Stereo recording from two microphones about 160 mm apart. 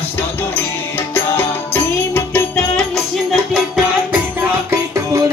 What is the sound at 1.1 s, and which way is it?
Music, 15° left (ahead or behind).